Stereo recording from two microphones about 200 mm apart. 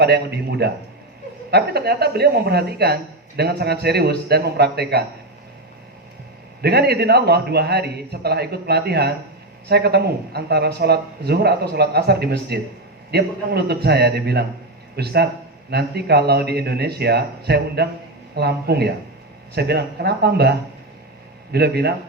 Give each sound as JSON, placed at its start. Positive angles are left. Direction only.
{"t": 0.0, "sound": "speech", "side_deg": -55}
{"t": 6.6, "sound": "a man's voice", "side_deg": -55}